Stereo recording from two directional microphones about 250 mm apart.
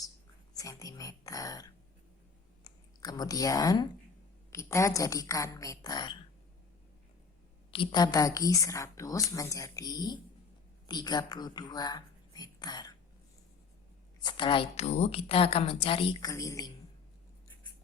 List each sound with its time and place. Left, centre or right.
0.5 s a woman's voice: centre
7.7 s a woman's voice: centre
14.3 s a woman's voice: centre